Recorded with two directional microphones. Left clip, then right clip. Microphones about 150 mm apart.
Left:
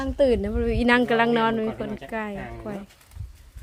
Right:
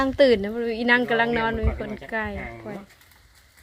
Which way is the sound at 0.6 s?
30° left (ahead or behind).